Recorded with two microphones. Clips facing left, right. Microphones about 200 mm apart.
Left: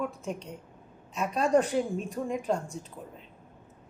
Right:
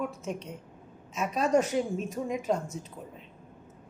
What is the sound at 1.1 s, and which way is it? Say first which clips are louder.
A woman's voice: left 1 dB; centre (ahead or behind).